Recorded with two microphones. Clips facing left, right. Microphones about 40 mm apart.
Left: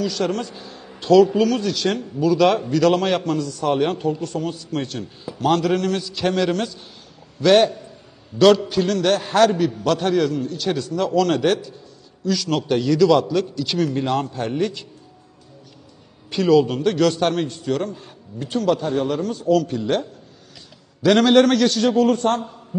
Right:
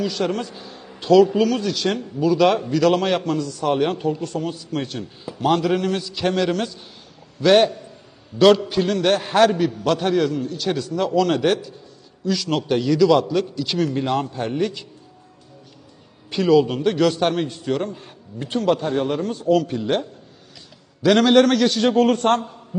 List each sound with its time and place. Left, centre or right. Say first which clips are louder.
0.0 s a man's voice: even; centre
16.3 s a man's voice: even; centre
17.7 s a man's voice: even; centre
18.3 s a man's voice: even; right; by 20.1 s centre
21.0 s a man's voice: even; centre
21.8 s a man's voice: right 2 dB; right